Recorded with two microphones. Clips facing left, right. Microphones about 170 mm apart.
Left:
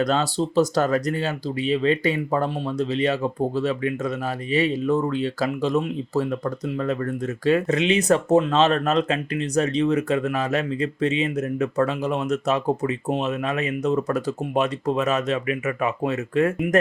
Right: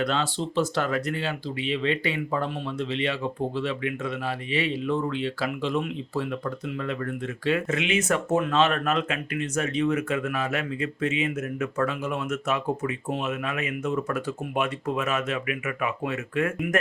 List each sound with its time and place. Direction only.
0.0 s speech: 40° left (ahead or behind)